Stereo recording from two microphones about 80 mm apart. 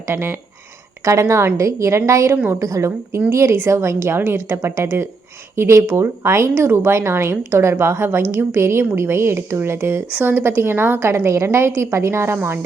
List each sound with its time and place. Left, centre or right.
0.1 s a woman's voice: right